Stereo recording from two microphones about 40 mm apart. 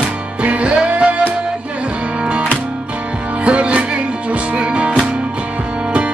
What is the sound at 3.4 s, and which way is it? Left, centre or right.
Music, right.